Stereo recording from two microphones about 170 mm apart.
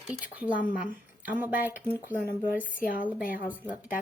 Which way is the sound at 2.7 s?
55° left (ahead or behind).